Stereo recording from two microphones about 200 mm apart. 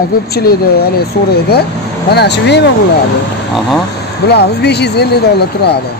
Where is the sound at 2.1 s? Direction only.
55° left (ahead or behind).